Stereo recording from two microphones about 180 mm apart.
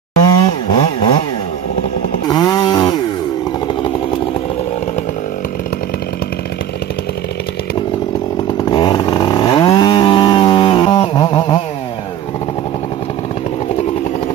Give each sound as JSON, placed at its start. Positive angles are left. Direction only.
{"t": 0.2, "sound": "chainsaw", "side_deg": 20}
{"t": 2.2, "sound": "chainsaw", "side_deg": 20}
{"t": 8.6, "sound": "chainsaw", "side_deg": 25}